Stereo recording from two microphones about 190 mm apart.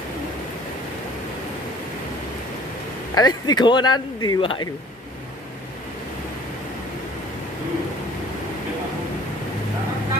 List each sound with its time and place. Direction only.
3.2 s speech: 20° left (ahead or behind)